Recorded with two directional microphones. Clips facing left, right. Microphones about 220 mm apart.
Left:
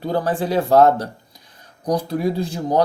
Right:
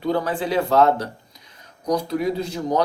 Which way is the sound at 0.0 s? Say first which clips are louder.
Left 1 dB; 35° left (ahead or behind).